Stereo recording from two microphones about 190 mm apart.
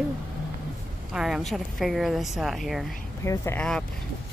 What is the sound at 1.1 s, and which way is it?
Speech, centre (ahead or behind).